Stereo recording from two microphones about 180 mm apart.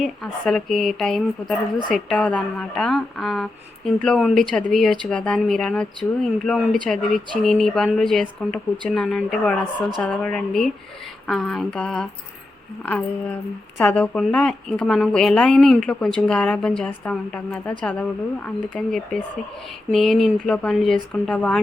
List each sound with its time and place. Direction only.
0.0 s speech: centre (ahead or behind)